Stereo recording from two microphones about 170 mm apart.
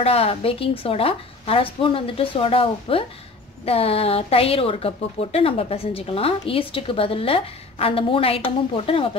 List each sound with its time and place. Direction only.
0.0 s a woman's voice: 35° left (ahead or behind)